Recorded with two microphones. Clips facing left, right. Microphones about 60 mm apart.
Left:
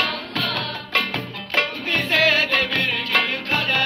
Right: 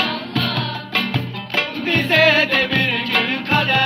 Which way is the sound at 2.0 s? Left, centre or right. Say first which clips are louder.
Right 4 dB; right.